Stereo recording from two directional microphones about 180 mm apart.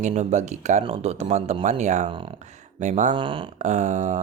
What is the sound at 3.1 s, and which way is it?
Speech, 30° right (ahead or behind).